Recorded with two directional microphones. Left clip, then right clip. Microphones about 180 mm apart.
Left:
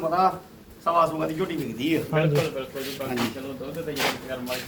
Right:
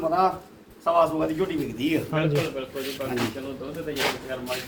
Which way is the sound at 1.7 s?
45° right (ahead or behind).